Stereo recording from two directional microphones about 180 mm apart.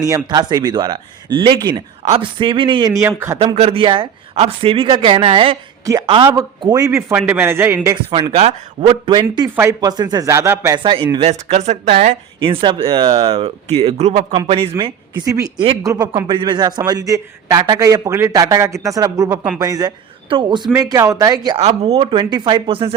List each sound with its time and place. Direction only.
0.0 s a man's voice: 20° right (ahead or behind)
3.0 s speech: 15° right (ahead or behind)
3.3 s speech: 35° right (ahead or behind)
5.8 s a woman's voice: 20° right (ahead or behind)
8.9 s a man's voice: 25° right (ahead or behind)
10.8 s speech: 30° right (ahead or behind)
12.4 s speech: 30° right (ahead or behind)
15.2 s a man's voice: 20° right (ahead or behind)
21.6 s a man's voice: 35° right (ahead or behind)